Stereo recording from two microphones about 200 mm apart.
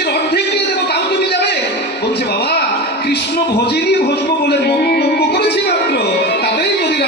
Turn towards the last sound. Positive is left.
turn(degrees=55)  # may be behind; listen again after turning